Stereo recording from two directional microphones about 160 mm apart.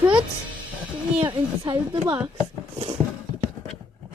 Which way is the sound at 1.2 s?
30° right (ahead or behind).